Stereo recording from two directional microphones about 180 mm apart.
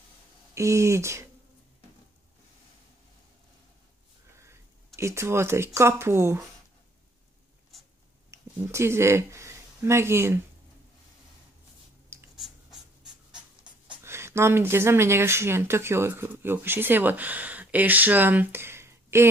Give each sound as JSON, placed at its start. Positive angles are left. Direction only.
{"t": 0.6, "sound": "speech", "side_deg": -15}
{"t": 4.4, "sound": "a sound", "side_deg": -15}
{"t": 5.8, "sound": "speech", "side_deg": -15}
{"t": 8.3, "sound": "speech", "side_deg": -15}
{"t": 12.4, "sound": "writing", "side_deg": 0}
{"t": 14.0, "sound": "speech", "side_deg": -15}